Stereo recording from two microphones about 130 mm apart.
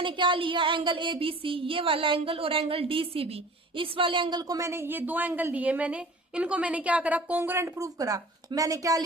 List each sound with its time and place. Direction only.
0.0 s a woman's voice: 40° right (ahead or behind)